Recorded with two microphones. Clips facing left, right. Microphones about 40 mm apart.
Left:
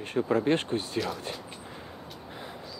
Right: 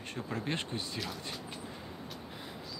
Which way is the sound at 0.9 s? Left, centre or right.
Centre.